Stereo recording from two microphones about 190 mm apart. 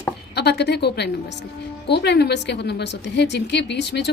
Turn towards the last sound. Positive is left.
turn(degrees=65)  # may be behind; listen again after turning